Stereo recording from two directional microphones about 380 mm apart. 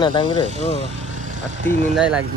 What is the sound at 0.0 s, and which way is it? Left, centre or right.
Speech, centre.